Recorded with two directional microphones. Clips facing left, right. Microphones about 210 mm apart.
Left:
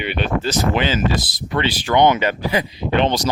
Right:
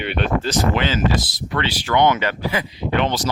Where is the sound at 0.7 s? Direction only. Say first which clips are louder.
Left 1 dB; 15° left (ahead or behind).